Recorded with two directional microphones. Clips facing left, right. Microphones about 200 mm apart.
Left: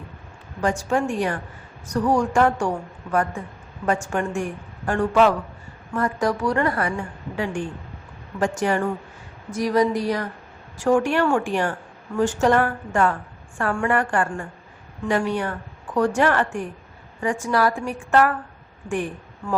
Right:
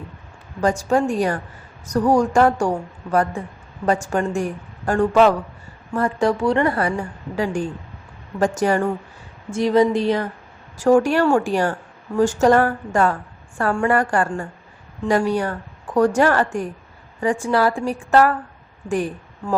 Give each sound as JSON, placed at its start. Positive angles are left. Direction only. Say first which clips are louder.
{"t": 0.6, "sound": "a woman's voice", "louder": "right 4 dB", "side_deg": -40}
{"t": 7.3, "sound": "a woman's voice", "louder": "right 4 dB", "side_deg": -40}
{"t": 9.5, "sound": "speech", "louder": "right 4 dB", "side_deg": -25}
{"t": 10.8, "sound": "a woman's voice", "louder": "right 4 dB", "side_deg": -40}